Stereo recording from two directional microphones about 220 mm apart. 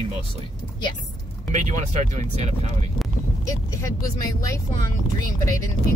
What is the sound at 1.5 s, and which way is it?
Speech, 35° right (ahead or behind).